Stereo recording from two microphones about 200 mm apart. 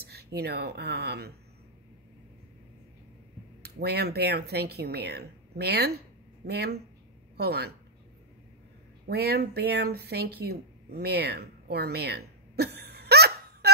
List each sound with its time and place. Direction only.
0.0 s speech: 55° right (ahead or behind)
3.6 s speech: 55° right (ahead or behind)
9.0 s speech: 55° right (ahead or behind)